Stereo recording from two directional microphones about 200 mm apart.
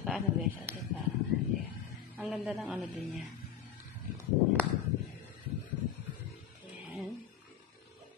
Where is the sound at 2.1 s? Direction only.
Centre (ahead or behind).